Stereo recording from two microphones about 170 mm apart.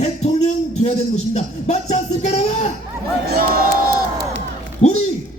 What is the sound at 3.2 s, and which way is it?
Crowd, 60° right (ahead or behind).